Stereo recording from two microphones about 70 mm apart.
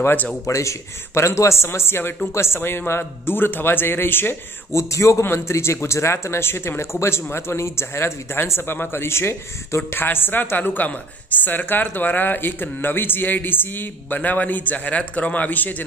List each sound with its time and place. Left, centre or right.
0.0 s speech: left
0.5 s a man's voice: left
4.9 s a man's voice: left